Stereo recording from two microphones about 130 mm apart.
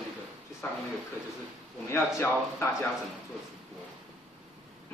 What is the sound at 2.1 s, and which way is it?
Speech, 20° left (ahead or behind).